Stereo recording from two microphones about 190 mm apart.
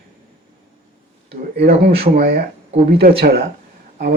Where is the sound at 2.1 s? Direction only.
50° right (ahead or behind).